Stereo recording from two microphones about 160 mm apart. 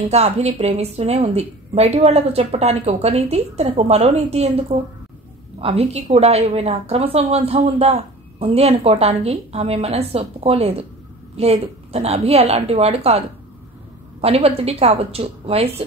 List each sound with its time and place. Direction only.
0.1 s a woman's voice: 40° right (ahead or behind)
14.2 s a woman's voice: 40° right (ahead or behind)